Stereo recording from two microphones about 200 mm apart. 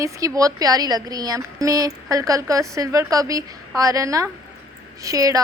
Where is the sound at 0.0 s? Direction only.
15° right (ahead or behind).